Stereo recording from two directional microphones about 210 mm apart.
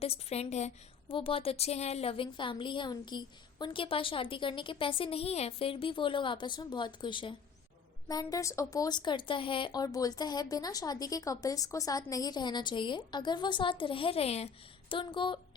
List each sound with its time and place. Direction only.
0.0 s a woman's voice: 30° left (ahead or behind)